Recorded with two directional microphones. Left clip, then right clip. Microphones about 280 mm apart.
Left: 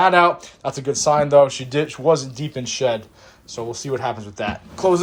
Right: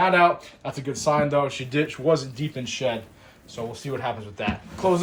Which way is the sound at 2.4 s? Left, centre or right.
Centre.